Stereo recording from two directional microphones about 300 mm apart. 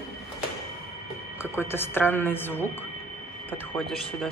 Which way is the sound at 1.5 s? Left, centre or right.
Centre.